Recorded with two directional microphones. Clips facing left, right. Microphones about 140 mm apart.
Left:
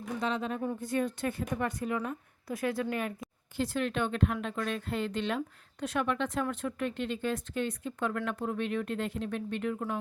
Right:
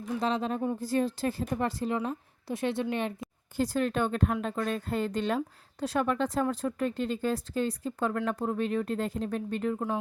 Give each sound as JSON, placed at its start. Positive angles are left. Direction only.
{"t": 0.2, "sound": "speech", "side_deg": -35}
{"t": 3.6, "sound": "speech", "side_deg": -40}